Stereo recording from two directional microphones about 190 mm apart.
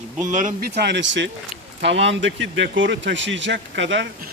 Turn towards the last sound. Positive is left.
turn(degrees=-75)  # may be behind; listen again after turning